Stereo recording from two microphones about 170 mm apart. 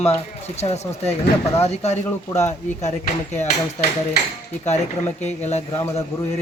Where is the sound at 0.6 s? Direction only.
40° left (ahead or behind).